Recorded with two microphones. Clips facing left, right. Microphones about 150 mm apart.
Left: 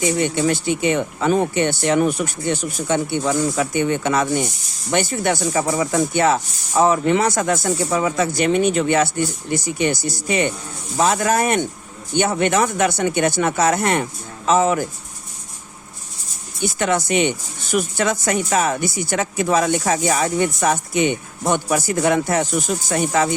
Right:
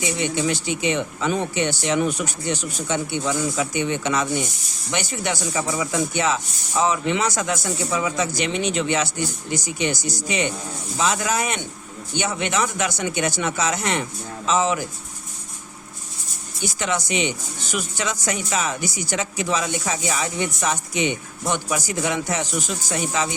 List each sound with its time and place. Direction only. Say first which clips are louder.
0.0 s speech: left 5 dB; 50° left (ahead or behind)
16.6 s speech: left 5 dB; 55° left (ahead or behind)